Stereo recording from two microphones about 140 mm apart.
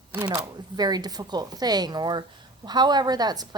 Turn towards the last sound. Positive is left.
turn(degrees=-30)  # may be behind; listen again after turning